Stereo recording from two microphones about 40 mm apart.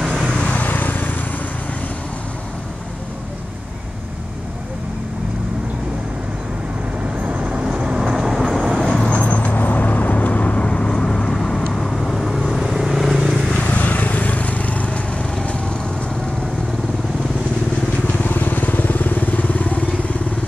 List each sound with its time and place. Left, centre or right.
0.0 s vehicle: centre
0.4 s vehicle: left
7.2 s vehicle: right
8.0 s vehicle: centre
8.7 s vehicle: centre
9.1 s vehicle: left
10.7 s vehicle: centre
13.5 s vehicle: left
18.0 s vehicle: left